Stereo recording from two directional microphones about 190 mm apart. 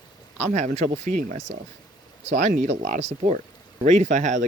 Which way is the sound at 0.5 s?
40° right (ahead or behind).